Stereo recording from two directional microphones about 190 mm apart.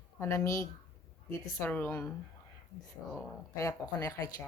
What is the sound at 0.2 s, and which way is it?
Speech, 15° left (ahead or behind).